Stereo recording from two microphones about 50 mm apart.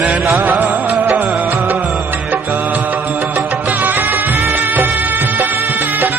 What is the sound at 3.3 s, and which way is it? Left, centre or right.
Music, right.